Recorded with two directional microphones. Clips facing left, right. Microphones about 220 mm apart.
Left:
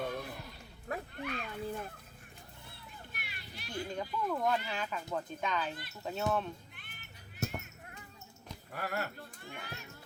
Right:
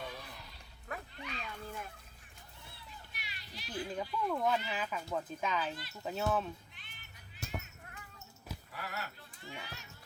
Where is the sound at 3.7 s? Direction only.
5° right (ahead or behind).